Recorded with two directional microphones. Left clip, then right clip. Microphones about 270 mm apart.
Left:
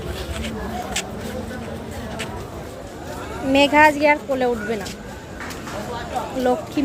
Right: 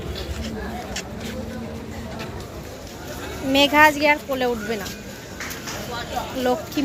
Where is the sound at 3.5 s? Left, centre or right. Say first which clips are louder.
Left 1 dB; centre.